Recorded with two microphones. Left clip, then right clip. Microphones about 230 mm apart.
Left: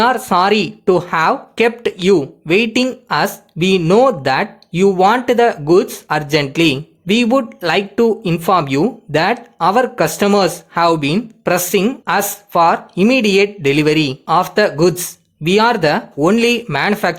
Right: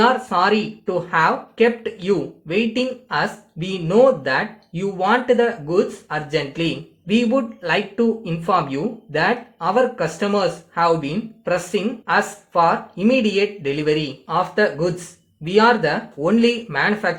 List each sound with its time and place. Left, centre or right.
0.0 s speech: left